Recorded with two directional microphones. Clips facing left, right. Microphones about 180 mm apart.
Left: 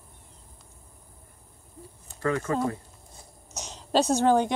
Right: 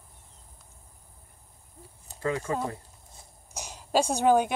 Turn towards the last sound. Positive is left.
turn(degrees=-10)  # may be behind; listen again after turning